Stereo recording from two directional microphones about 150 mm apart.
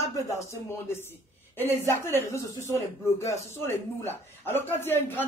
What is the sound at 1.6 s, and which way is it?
A man's voice, 15° left (ahead or behind).